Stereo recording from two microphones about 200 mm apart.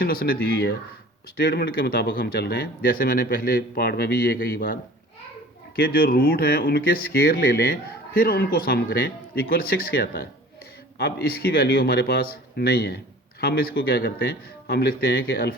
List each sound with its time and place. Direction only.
0.0 s speech: 45° left (ahead or behind)